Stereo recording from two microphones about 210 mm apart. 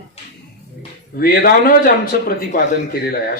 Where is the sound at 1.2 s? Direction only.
45° left (ahead or behind).